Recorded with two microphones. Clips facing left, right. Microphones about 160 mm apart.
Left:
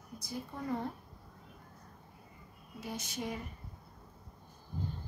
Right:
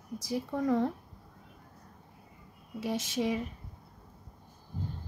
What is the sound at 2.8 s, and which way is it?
Speech, 90° right.